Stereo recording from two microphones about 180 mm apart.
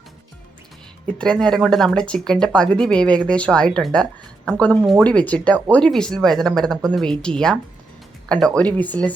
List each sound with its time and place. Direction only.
1.2 s speech: 5° left (ahead or behind)